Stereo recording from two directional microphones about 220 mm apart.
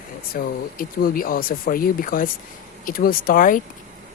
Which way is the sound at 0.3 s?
40° left (ahead or behind).